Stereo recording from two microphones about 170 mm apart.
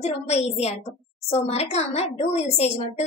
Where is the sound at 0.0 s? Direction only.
40° left (ahead or behind).